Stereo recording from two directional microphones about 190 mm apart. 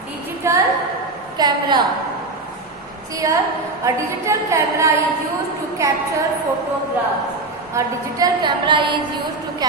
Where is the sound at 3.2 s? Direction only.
15° right (ahead or behind).